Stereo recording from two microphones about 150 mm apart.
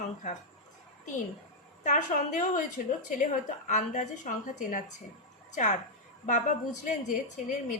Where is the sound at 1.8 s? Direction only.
55° left (ahead or behind).